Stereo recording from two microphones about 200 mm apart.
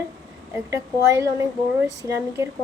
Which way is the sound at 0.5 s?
15° right (ahead or behind).